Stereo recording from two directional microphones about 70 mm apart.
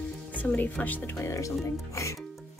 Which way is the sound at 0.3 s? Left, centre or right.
Left.